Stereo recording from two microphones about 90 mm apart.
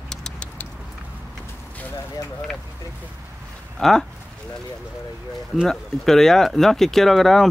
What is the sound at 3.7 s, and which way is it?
Speech, 5° left (ahead or behind).